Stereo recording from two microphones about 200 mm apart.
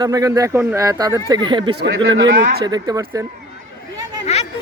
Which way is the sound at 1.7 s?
65° right (ahead or behind).